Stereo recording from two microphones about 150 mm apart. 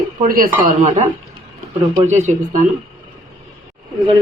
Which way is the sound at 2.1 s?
50° right (ahead or behind).